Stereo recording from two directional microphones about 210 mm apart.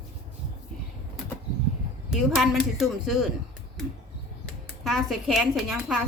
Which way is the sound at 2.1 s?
Centre (ahead or behind).